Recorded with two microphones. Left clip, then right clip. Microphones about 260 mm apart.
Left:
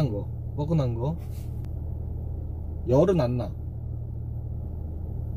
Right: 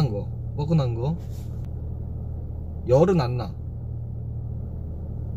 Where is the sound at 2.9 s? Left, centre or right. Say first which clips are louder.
Right 2 dB; centre.